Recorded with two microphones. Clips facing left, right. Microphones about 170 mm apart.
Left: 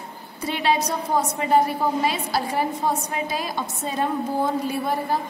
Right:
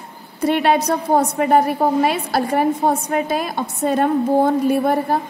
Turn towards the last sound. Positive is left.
turn(degrees=-60)  # may be behind; listen again after turning